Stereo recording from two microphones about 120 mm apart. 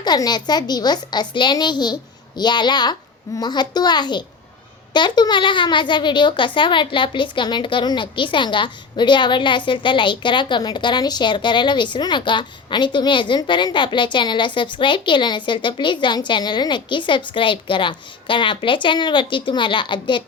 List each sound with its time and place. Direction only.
0.0 s a child's voice: 35° left (ahead or behind)